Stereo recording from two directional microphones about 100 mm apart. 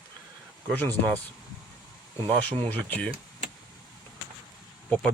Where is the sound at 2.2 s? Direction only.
15° left (ahead or behind).